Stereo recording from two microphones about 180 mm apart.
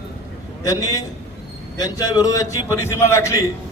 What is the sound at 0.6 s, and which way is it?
Speech, 20° left (ahead or behind).